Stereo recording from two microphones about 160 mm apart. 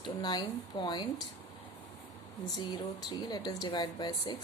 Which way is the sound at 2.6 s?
25° left (ahead or behind).